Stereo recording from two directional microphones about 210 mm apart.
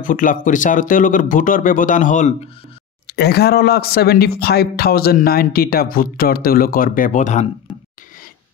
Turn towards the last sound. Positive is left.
turn(degrees=35)  # may be behind; listen again after turning